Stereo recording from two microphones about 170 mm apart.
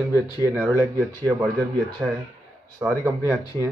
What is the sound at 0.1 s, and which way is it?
Speech, 20° left (ahead or behind).